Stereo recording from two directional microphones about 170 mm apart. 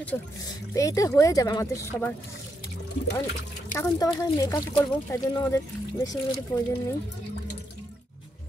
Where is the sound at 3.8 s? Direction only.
20° left (ahead or behind).